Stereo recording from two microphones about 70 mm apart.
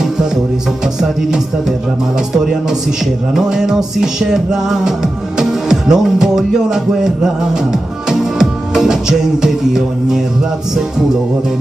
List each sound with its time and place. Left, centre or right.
3.3 s music: centre